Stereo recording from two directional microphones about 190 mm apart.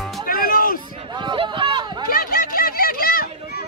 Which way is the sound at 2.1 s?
50° left (ahead or behind).